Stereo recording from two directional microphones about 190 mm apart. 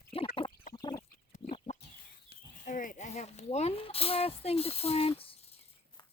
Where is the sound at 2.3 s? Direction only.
45° left (ahead or behind).